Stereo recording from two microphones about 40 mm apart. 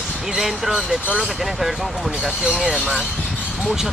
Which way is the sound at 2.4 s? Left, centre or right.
Right.